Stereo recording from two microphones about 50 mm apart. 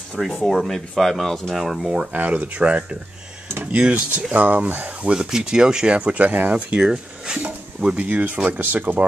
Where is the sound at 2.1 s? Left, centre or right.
Right.